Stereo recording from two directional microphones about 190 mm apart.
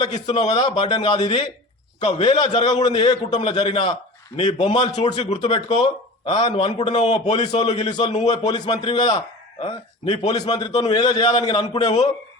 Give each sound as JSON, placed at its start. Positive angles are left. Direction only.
{"t": 0.3, "sound": "a man's voice", "side_deg": 25}